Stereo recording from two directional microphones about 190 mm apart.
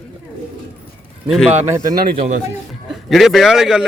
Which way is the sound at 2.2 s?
40° right (ahead or behind).